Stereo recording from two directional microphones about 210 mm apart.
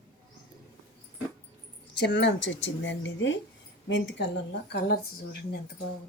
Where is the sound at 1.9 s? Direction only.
55° left (ahead or behind).